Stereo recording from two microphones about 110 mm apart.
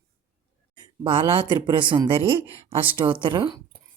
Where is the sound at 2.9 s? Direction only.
50° right (ahead or behind).